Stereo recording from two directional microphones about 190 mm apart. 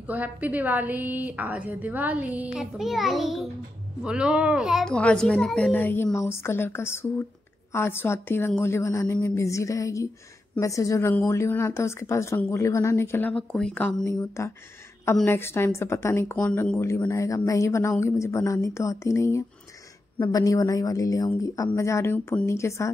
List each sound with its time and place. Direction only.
0.0 s a woman's voice: 10° right (ahead or behind); by 22.8 s 15° left (ahead or behind)